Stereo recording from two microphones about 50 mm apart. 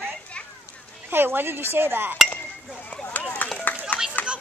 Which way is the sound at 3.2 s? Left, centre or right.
Left.